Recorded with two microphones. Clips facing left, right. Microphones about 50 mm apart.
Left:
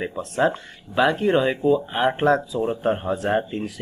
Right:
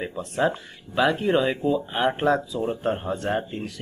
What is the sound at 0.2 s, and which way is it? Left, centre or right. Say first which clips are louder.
Speech: left 2 dB; centre.